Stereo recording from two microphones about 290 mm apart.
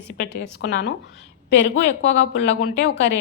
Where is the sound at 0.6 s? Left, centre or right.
Left.